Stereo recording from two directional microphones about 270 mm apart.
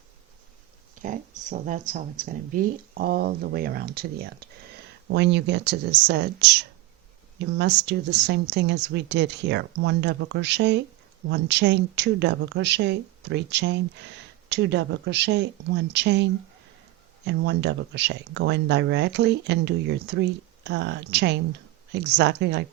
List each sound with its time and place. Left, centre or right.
1.0 s speech: right